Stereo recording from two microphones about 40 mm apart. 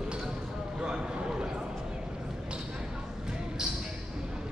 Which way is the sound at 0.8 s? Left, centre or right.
Right.